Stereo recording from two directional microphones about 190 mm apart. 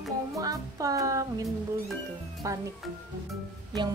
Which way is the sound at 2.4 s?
15° right (ahead or behind).